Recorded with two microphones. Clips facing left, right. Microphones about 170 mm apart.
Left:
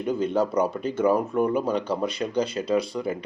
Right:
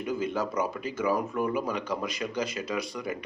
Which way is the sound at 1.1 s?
25° left (ahead or behind).